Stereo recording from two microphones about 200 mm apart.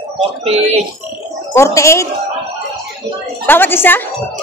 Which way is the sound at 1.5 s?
15° left (ahead or behind).